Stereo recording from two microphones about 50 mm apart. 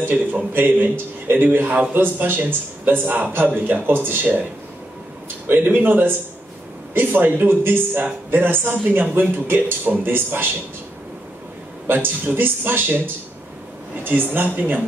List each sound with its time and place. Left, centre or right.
0.1 s speech: right
0.5 s a man's voice: right
5.5 s a man's voice: right
11.9 s speech: right